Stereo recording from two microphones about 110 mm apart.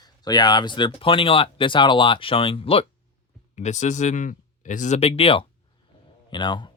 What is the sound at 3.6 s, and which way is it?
Speech, 90° left.